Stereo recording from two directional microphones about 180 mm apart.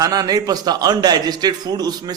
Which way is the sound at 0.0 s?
20° right (ahead or behind).